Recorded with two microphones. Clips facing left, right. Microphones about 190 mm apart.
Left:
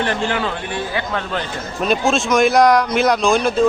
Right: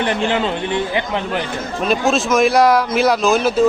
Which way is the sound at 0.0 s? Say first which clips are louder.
Right 2 dB; 20° right (ahead or behind).